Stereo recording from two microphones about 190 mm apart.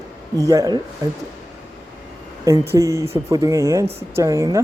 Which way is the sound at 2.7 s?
15° right (ahead or behind).